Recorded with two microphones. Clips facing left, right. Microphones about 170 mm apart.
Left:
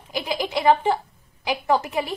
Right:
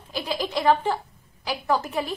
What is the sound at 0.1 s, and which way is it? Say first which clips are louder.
A woman's voice: left 2 dB; 15° left (ahead or behind).